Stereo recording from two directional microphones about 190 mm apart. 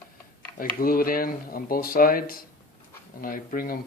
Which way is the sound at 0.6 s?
50° left (ahead or behind).